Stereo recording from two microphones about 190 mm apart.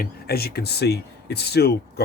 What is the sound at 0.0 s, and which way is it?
Speech, 55° left (ahead or behind).